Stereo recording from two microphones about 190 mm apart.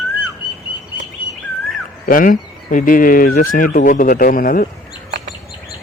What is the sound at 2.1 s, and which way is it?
Speech, 45° left (ahead or behind).